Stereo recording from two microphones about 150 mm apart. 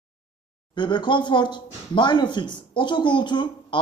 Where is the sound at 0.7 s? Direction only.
30° left (ahead or behind).